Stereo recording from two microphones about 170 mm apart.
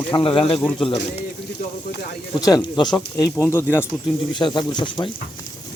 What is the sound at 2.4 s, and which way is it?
Speech, 20° left (ahead or behind).